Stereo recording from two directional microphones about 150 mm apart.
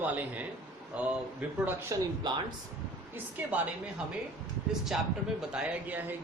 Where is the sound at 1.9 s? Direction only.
20° right (ahead or behind).